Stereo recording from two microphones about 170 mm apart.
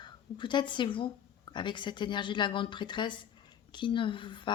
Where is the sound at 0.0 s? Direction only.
30° left (ahead or behind).